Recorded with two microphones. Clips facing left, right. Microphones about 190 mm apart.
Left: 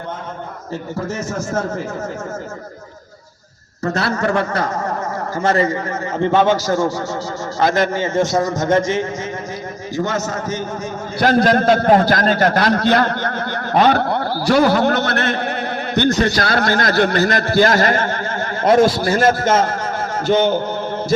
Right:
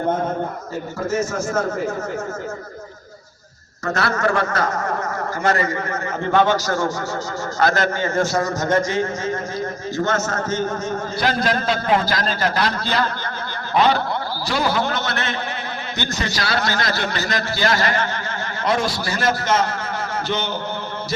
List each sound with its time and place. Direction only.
3.9 s a man's voice: 30° left (ahead or behind)
11.2 s a man's voice: 50° left (ahead or behind); by 13.3 s 65° left (ahead or behind)
13.7 s a man's voice: 55° left (ahead or behind)